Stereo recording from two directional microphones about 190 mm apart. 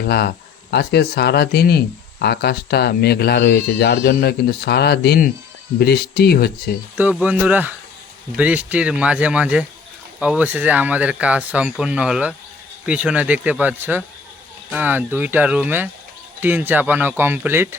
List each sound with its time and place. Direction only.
0.0 s speech: 60° left (ahead or behind)
6.9 s speech: 10° right (ahead or behind)